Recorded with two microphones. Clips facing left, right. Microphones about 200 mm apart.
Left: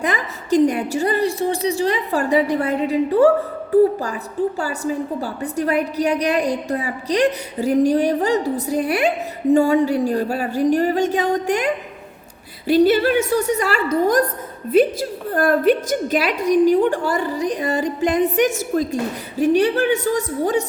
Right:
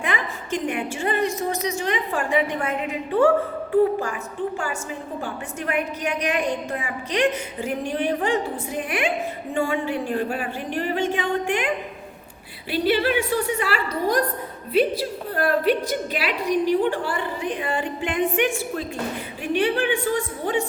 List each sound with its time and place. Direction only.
0.0 s a woman's voice: 40° left (ahead or behind)